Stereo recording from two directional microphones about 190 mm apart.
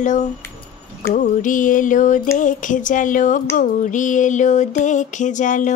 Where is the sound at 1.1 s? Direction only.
45° left (ahead or behind).